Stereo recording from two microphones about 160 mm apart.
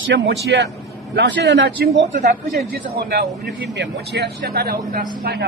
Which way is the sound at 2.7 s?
80° right.